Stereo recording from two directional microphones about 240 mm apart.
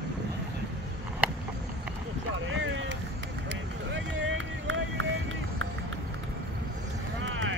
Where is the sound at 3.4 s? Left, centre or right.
Right.